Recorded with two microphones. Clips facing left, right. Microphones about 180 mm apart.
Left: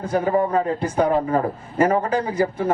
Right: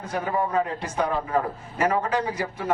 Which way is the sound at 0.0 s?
30° left (ahead or behind).